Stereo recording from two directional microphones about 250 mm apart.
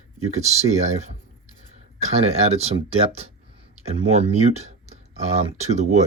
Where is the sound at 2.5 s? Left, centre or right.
Right.